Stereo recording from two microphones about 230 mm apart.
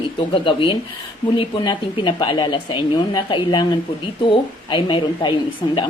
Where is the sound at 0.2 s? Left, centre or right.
Left.